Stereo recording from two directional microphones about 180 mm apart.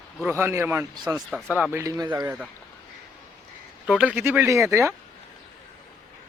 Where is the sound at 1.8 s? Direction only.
20° right (ahead or behind).